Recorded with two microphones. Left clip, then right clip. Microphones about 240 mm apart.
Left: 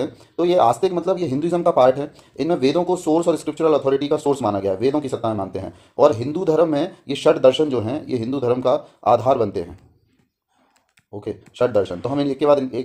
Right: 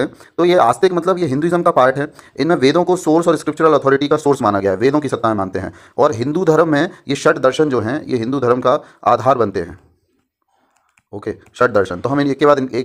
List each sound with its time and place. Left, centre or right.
0.0 s speech: right
3.4 s speech: right
3.8 s speech: right
11.1 s speech: right
12.0 s speech: right